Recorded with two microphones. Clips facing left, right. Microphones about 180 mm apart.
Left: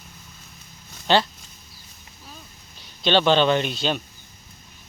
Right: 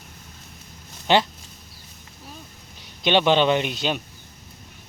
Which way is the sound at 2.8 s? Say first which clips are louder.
Even; 15° right (ahead or behind).